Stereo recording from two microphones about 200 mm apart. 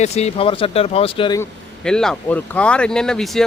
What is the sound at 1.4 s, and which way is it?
Speech, 5° left (ahead or behind).